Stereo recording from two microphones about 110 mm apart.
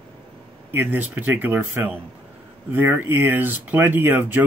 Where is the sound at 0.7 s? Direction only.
20° right (ahead or behind).